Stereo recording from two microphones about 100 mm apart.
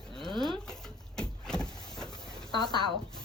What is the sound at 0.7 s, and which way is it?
Vehicle, 5° left (ahead or behind).